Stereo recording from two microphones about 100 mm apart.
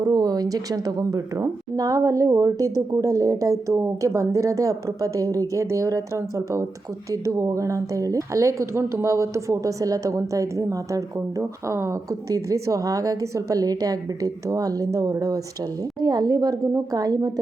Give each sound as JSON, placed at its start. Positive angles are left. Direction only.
{"t": 0.0, "sound": "speech", "side_deg": -40}